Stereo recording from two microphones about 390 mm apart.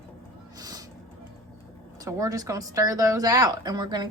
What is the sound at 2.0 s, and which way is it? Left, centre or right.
A woman's voice, centre.